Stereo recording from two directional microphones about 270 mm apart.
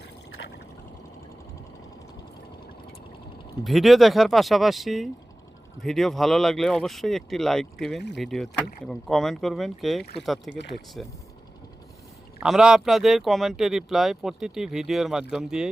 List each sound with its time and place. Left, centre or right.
3.6 s speech: centre
12.4 s speech: centre